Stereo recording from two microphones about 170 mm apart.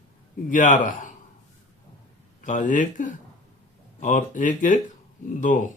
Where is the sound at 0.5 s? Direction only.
50° left (ahead or behind).